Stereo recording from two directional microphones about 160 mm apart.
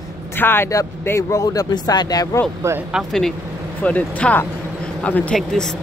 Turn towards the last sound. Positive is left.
turn(degrees=5)  # may be behind; listen again after turning